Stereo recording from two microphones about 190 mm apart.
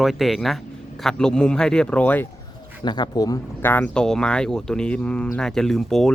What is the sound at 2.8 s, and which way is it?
Speech, 20° left (ahead or behind).